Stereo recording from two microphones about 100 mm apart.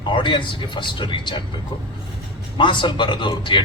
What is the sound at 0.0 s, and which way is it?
Speech, 50° left (ahead or behind).